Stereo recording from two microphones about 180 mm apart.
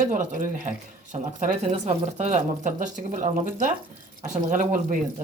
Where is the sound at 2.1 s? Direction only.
35° right (ahead or behind).